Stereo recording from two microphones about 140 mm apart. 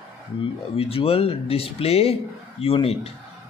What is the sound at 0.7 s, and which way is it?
Speech, 45° left (ahead or behind).